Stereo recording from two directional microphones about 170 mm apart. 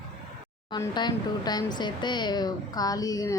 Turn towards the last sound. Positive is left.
turn(degrees=20)  # may be behind; listen again after turning